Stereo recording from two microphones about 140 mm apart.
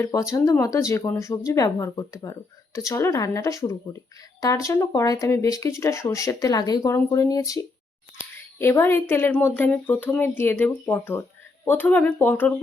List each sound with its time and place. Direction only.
0.0 s speech: 25° left (ahead or behind)
8.2 s a sound: 15° left (ahead or behind)
8.8 s a woman's voice: 15° left (ahead or behind)